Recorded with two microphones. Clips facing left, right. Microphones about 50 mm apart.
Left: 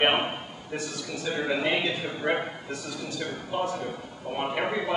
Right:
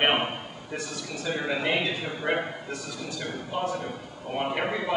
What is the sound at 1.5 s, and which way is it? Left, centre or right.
A man's voice, centre.